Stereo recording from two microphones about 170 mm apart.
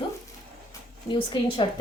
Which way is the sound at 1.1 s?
30° left (ahead or behind).